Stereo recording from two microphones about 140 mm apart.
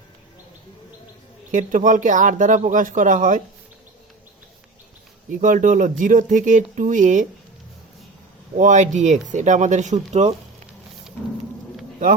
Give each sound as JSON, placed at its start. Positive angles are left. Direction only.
{"t": 1.5, "sound": "speech", "side_deg": -65}
{"t": 5.4, "sound": "speech", "side_deg": -65}
{"t": 8.5, "sound": "speech", "side_deg": -60}